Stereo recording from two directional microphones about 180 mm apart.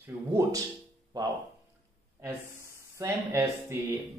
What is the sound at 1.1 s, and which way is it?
Speech, 20° right (ahead or behind).